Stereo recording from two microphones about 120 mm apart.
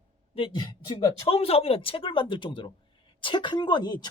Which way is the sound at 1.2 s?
55° left (ahead or behind).